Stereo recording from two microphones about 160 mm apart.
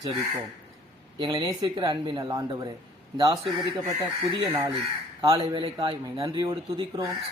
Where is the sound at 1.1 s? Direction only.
30° right (ahead or behind).